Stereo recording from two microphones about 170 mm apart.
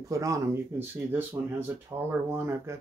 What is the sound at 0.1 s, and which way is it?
Speech, 20° right (ahead or behind).